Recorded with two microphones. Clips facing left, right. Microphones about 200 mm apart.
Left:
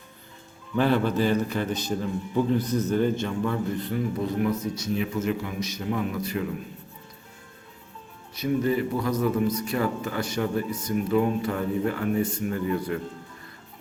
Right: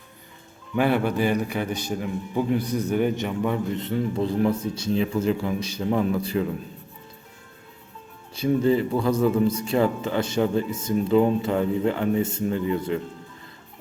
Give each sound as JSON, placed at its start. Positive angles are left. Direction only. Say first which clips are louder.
{"t": 0.8, "sound": "a man's voice", "louder": "right 1 dB", "side_deg": -10}
{"t": 8.4, "sound": "a man's voice", "louder": "right 4 dB", "side_deg": -25}